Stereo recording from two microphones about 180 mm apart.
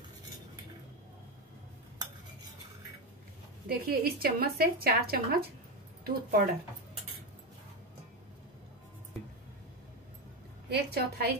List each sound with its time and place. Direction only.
3.6 s speech: 55° right (ahead or behind)
10.7 s speech: 60° right (ahead or behind)